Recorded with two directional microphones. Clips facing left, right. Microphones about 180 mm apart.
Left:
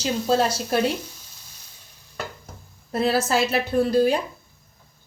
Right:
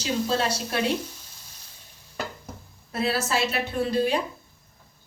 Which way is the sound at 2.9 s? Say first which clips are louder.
Left 5 dB; 40° left (ahead or behind).